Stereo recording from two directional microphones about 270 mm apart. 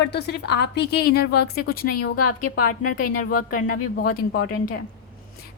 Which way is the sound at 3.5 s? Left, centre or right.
Left.